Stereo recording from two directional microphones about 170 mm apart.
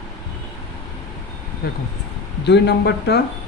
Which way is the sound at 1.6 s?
65° left (ahead or behind).